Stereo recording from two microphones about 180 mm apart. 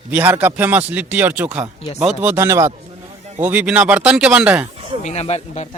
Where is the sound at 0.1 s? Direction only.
10° right (ahead or behind).